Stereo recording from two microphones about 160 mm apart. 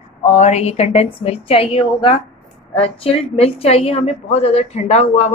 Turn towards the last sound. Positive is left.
turn(degrees=45)  # may be behind; listen again after turning